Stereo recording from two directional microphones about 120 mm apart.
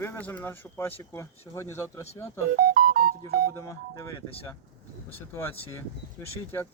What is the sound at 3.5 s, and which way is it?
Speech, 25° left (ahead or behind).